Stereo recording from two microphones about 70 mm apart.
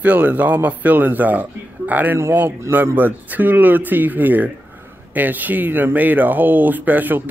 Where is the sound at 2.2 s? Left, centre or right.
Right.